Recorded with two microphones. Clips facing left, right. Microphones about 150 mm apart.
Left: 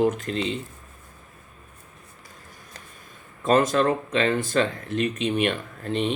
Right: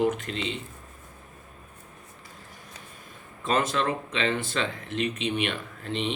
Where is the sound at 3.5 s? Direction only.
45° left (ahead or behind).